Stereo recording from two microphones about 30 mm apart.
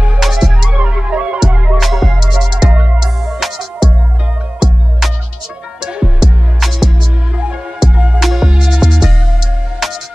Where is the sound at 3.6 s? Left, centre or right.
Centre.